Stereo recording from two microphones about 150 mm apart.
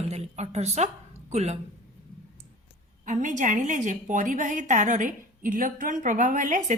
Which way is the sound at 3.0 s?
55° right (ahead or behind).